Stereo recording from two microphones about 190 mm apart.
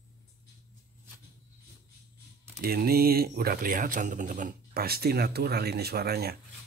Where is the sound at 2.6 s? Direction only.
55° right (ahead or behind).